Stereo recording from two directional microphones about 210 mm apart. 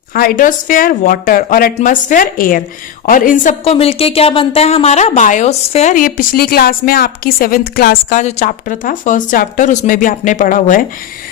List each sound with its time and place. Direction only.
0.1 s speech: 45° left (ahead or behind)
3.6 s speech: 30° left (ahead or behind)